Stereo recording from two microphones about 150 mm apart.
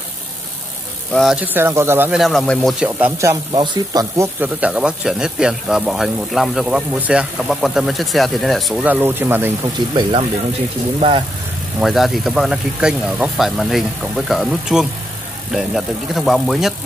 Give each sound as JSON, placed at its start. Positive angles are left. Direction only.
{"t": 1.1, "sound": "speech", "side_deg": 0}
{"t": 1.4, "sound": "speech", "side_deg": -15}
{"t": 2.1, "sound": "speech", "side_deg": 0}
{"t": 3.2, "sound": "speech", "side_deg": -20}
{"t": 4.4, "sound": "speech", "side_deg": -10}
{"t": 8.8, "sound": "speech", "side_deg": -15}
{"t": 9.8, "sound": "speech", "side_deg": -30}
{"t": 11.8, "sound": "speech", "side_deg": 0}